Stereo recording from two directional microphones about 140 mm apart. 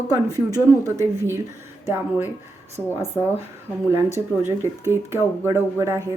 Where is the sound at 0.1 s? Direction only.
25° right (ahead or behind).